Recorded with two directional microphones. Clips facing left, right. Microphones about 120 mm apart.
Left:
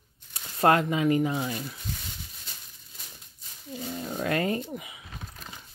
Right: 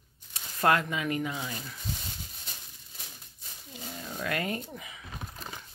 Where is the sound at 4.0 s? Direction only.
35° left (ahead or behind).